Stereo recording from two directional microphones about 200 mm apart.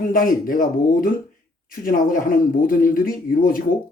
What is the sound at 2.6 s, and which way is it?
Speech, 45° left (ahead or behind).